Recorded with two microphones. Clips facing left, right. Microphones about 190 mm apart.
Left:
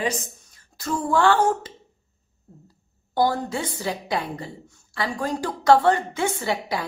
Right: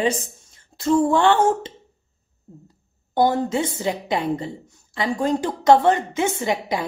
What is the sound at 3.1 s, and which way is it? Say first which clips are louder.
A woman's voice: right 4 dB; 20° right (ahead or behind).